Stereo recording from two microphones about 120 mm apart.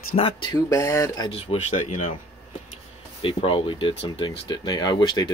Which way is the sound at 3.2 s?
50° left (ahead or behind).